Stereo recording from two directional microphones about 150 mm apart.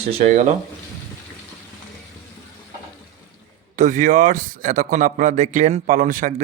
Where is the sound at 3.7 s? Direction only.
55° right (ahead or behind).